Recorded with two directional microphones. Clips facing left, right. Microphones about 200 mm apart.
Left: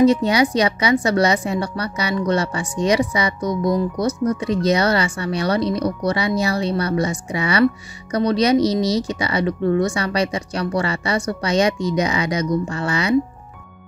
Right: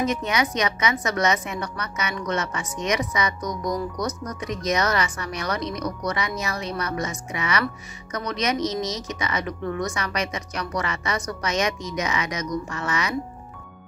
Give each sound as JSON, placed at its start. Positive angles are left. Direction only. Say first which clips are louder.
{"t": 0.0, "sound": "a woman's voice", "louder": "left 9 dB", "side_deg": 30}